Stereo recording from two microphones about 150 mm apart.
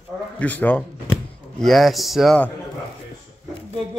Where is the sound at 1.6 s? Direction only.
Centre (ahead or behind).